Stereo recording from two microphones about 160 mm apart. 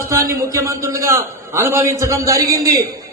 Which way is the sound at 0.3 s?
20° right (ahead or behind).